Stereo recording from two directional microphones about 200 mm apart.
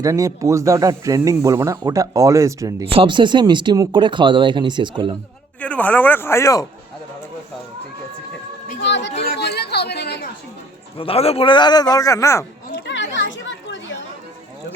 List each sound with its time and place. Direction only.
0.0 s speech: 15° right (ahead or behind)
2.8 s speech: 25° right (ahead or behind)
5.5 s speech: 5° left (ahead or behind)
8.8 s chatter: 65° left (ahead or behind)
10.9 s a man's voice: 30° left (ahead or behind)
12.8 s children playing: 65° left (ahead or behind)